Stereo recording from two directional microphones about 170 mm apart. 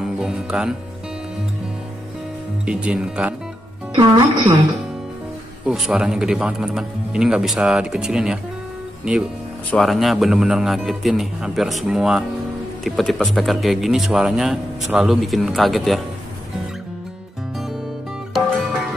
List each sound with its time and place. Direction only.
0.0 s music: 5° right (ahead or behind)
2.6 s speech: 5° right (ahead or behind)
3.9 s speech: 25° right (ahead or behind)
5.7 s speech: 5° right (ahead or behind)
9.7 s speech: centre (ahead or behind)
18.3 s music: centre (ahead or behind)